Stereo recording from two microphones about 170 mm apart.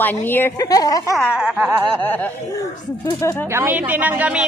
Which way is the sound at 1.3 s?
5° right (ahead or behind).